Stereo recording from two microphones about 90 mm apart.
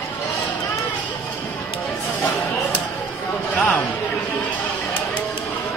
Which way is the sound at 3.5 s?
20° left (ahead or behind).